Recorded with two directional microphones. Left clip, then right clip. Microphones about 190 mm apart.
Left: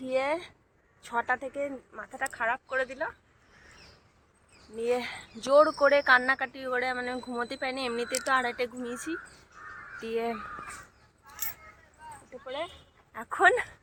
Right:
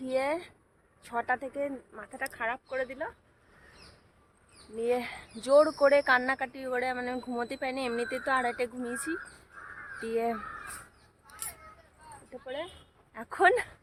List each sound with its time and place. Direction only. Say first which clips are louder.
0.0 s speech: left 1 dB; 10° right (ahead or behind)
4.8 s speech: left 1 dB; 15° right (ahead or behind)
12.3 s speech: left 2 dB; 5° right (ahead or behind)